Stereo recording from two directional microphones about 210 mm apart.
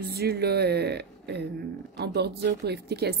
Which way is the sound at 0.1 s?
50° right (ahead or behind).